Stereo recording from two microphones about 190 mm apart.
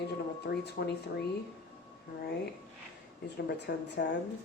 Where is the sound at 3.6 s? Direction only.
60° left (ahead or behind).